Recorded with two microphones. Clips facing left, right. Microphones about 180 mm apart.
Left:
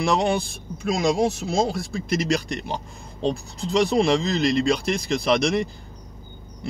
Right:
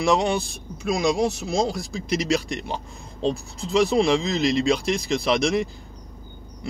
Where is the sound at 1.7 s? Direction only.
55° left (ahead or behind).